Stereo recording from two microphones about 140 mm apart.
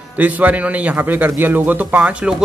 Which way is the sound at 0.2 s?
10° right (ahead or behind).